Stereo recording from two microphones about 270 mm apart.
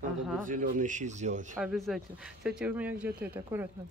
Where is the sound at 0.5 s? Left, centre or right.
Right.